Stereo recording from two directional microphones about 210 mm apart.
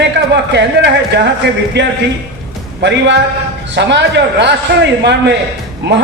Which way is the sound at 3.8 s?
55° right (ahead or behind).